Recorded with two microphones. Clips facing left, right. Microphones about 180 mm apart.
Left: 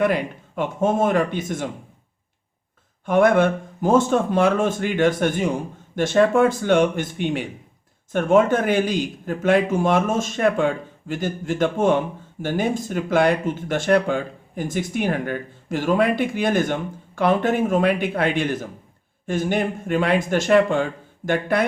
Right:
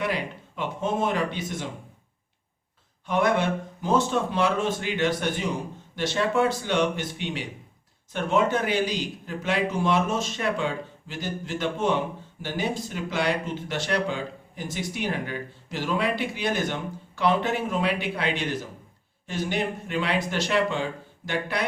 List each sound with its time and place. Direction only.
0.0 s a man's voice: 50° left (ahead or behind)
3.1 s a man's voice: 50° left (ahead or behind)